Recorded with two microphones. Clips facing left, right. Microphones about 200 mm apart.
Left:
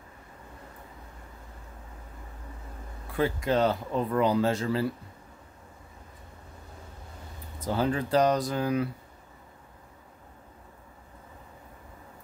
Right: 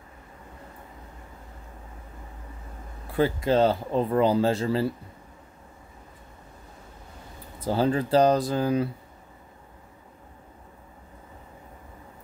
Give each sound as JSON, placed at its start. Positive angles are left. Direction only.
{"t": 3.2, "sound": "speech", "side_deg": -30}
{"t": 7.6, "sound": "speech", "side_deg": -30}